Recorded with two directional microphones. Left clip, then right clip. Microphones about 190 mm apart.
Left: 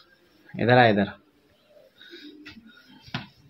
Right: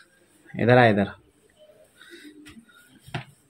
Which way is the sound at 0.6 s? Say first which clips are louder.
Right 1 dB; 10° right (ahead or behind).